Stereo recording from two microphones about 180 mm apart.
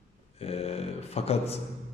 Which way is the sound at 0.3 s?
35° left (ahead or behind).